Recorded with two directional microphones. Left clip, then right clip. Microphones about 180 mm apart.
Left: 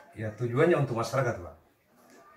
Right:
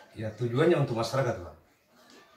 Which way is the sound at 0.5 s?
15° left (ahead or behind).